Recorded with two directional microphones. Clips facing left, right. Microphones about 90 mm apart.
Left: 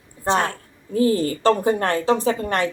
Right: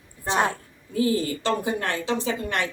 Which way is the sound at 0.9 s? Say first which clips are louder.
Left 4 dB; 40° left (ahead or behind).